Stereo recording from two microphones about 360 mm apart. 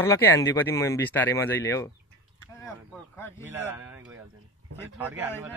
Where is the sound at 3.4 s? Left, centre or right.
Centre.